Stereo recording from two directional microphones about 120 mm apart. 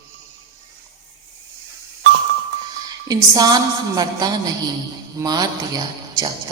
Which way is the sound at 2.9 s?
30° right (ahead or behind).